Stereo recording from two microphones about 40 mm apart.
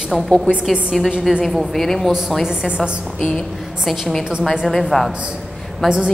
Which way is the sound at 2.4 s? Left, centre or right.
Centre.